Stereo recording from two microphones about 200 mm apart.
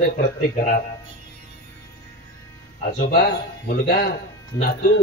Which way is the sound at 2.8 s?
50° left (ahead or behind).